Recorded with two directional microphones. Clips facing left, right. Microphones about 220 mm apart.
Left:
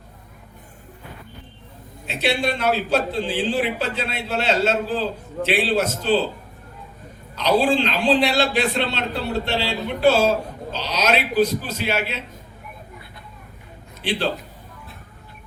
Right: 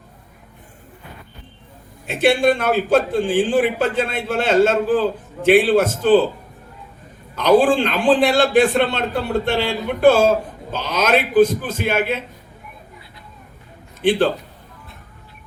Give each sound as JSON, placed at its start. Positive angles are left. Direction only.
{"t": 2.0, "sound": "a man's voice", "side_deg": -50}
{"t": 7.3, "sound": "a man's voice", "side_deg": -50}
{"t": 14.0, "sound": "a man's voice", "side_deg": -50}